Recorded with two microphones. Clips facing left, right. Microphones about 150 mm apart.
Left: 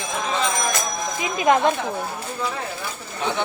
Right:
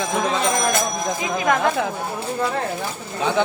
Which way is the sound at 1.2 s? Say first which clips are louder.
Left 3 dB; 20° left (ahead or behind).